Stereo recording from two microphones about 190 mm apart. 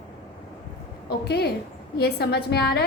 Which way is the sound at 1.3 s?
60° left (ahead or behind).